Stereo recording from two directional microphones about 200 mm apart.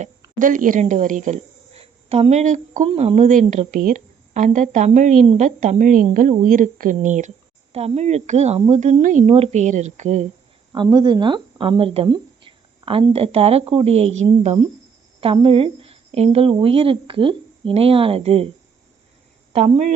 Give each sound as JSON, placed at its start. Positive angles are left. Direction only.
{"t": 0.3, "sound": "a woman's voice", "side_deg": -40}
{"t": 10.7, "sound": "a woman's voice", "side_deg": -20}
{"t": 19.5, "sound": "a woman's voice", "side_deg": -30}